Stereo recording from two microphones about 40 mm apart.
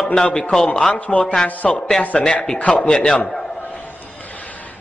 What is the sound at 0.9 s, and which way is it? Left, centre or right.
Speech, left.